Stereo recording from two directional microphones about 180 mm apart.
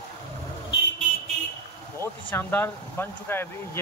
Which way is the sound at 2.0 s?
10° left (ahead or behind).